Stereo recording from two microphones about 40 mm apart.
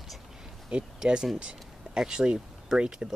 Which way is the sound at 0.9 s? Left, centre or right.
Centre.